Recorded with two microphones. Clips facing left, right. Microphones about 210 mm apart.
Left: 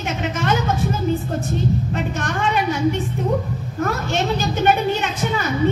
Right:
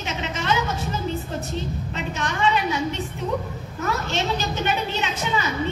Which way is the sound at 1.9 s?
50° left (ahead or behind).